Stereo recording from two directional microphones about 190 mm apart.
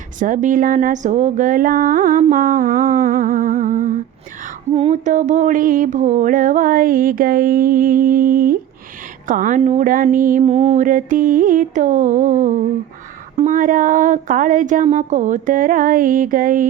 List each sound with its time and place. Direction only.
0.2 s speech: 45° right (ahead or behind)
4.7 s mantra: 35° right (ahead or behind)
10.4 s mantra: 35° right (ahead or behind)